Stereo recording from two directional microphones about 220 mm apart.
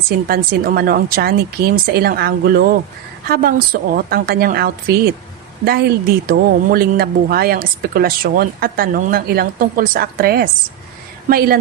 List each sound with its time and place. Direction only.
0.3 s speech: 40° right (ahead or behind)